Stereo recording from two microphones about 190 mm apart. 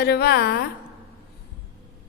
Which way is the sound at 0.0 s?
55° left (ahead or behind).